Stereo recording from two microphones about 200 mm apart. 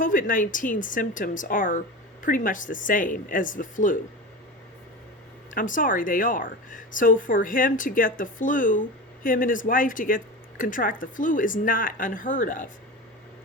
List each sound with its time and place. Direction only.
0.0 s a woman's voice: 40° left (ahead or behind)
5.5 s a woman's voice: 40° left (ahead or behind)